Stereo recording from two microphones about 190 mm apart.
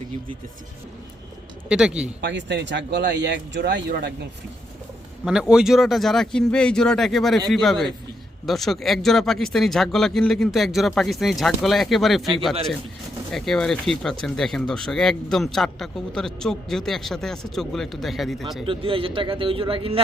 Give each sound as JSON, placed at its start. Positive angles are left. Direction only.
{"t": 1.7, "sound": "speech", "side_deg": -5}
{"t": 2.2, "sound": "speech", "side_deg": -65}
{"t": 5.2, "sound": "speech", "side_deg": -5}
{"t": 13.3, "sound": "speech", "side_deg": 0}
{"t": 18.6, "sound": "speech", "side_deg": -30}